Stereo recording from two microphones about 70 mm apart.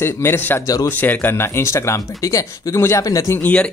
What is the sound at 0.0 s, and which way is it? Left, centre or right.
Speech, left.